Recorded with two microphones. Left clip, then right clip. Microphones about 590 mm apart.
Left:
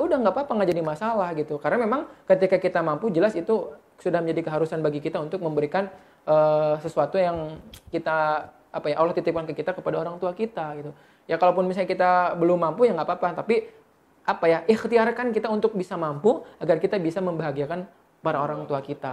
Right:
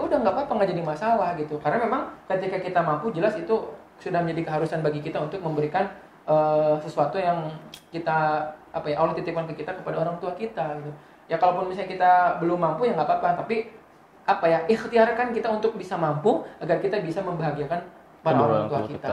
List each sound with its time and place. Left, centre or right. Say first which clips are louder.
0.1 s a man's voice: even; left